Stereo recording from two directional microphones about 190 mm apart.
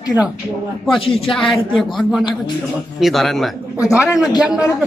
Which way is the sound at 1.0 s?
30° left (ahead or behind).